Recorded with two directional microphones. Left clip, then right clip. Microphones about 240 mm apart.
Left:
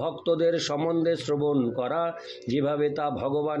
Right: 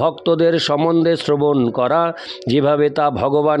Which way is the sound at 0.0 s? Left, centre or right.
Right.